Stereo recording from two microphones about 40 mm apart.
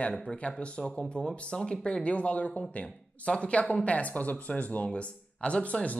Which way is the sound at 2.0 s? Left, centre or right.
Left.